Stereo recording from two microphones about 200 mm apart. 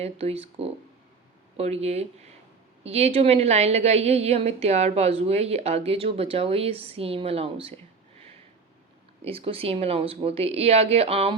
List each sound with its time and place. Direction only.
0.0 s a woman's voice: 30° right (ahead or behind)
9.2 s speech: 30° right (ahead or behind)